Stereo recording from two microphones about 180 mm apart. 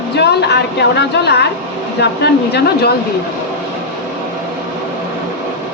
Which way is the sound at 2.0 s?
65° left (ahead or behind).